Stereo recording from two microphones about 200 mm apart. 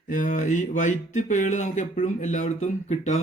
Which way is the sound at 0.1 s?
40° left (ahead or behind).